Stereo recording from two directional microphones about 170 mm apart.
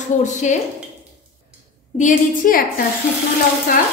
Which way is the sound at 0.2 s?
45° left (ahead or behind).